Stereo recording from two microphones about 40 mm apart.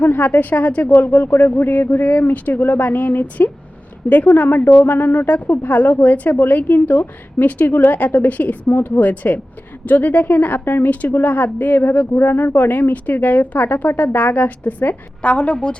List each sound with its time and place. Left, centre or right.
0.0 s a woman's voice: left
15.3 s a woman's voice: left